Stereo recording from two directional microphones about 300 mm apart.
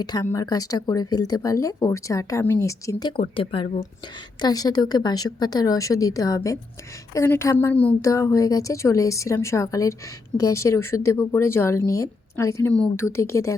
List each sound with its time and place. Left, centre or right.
0.0 s speech: centre